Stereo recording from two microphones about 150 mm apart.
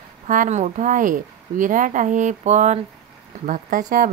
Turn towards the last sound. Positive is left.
turn(degrees=-60)  # may be behind; listen again after turning